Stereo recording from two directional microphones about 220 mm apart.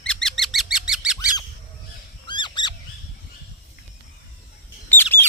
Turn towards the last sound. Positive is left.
turn(degrees=10)  # may be behind; listen again after turning